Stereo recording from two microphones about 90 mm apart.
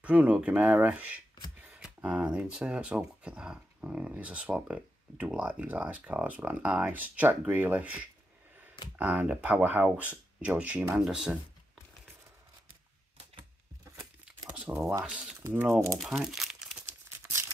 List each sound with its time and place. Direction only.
0.0 s speech: 15° right (ahead or behind)
1.6 s scissors: 10° right (ahead or behind)
2.0 s speech: 10° right (ahead or behind)
14.5 s speech: 10° right (ahead or behind)
15.7 s speech: 30° right (ahead or behind)
16.0 s crumpling: 5° right (ahead or behind)
17.2 s crumpling: 30° right (ahead or behind)